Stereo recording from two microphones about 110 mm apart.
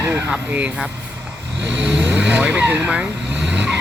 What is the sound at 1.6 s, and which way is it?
Vehicle, 10° right (ahead or behind).